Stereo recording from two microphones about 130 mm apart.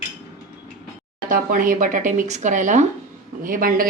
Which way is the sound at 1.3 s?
90° right.